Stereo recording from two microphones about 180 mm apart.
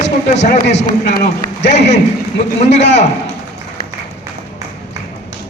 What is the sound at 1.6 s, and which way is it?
A man's voice, 40° left (ahead or behind).